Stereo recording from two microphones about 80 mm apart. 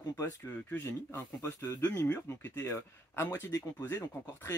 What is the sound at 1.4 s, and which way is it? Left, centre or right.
Speech, left.